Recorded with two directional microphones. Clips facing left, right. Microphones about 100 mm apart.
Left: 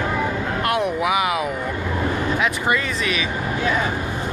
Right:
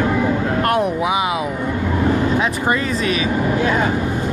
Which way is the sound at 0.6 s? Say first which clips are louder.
Right 3 dB; 40° right (ahead or behind).